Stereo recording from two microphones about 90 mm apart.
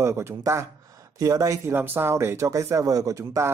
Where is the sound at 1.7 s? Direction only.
20° right (ahead or behind).